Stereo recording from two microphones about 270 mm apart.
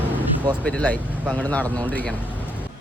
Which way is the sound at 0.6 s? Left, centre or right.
Centre.